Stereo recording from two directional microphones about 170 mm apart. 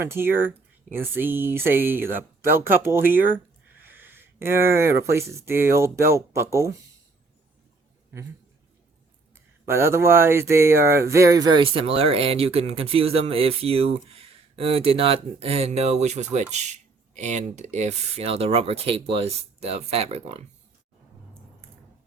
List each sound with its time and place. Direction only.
0.0 s speech: 15° right (ahead or behind)
9.6 s speech: 15° right (ahead or behind); by 20.4 s 35° right (ahead or behind)